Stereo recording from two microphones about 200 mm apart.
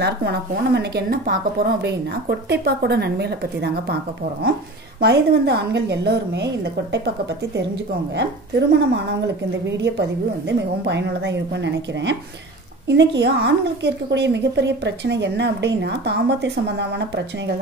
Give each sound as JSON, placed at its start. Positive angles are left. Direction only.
{"t": 0.0, "sound": "a woman's voice", "side_deg": -55}
{"t": 8.2, "sound": "a woman's voice", "side_deg": -60}